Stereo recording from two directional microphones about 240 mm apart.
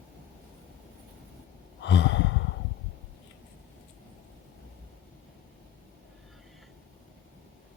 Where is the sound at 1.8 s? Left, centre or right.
Left.